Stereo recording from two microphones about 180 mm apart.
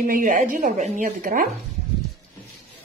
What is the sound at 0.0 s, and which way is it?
A woman's voice, 50° right (ahead or behind).